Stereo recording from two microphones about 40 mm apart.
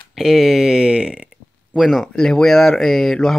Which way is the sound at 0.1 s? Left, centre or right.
Centre.